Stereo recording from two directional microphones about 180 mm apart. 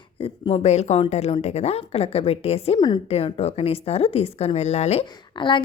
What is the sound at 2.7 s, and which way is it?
Speech, 20° left (ahead or behind).